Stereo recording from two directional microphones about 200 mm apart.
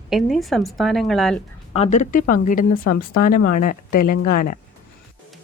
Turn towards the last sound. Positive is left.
turn(degrees=45)  # may be behind; listen again after turning